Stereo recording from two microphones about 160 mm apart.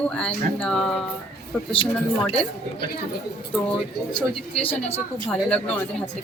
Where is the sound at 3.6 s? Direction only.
5° left (ahead or behind).